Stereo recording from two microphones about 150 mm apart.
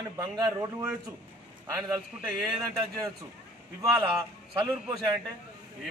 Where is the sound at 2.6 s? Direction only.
20° right (ahead or behind).